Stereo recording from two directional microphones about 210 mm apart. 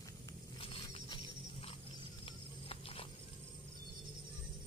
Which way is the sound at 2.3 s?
25° left (ahead or behind).